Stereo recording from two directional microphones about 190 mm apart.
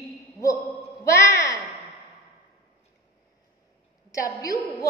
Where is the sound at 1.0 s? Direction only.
15° left (ahead or behind).